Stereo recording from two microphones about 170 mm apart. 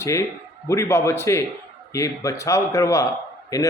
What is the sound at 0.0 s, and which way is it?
A man's voice, 15° left (ahead or behind).